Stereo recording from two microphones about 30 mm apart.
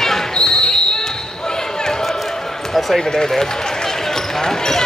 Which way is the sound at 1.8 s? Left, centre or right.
Centre.